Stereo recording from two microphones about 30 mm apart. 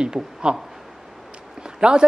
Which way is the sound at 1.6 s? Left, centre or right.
Right.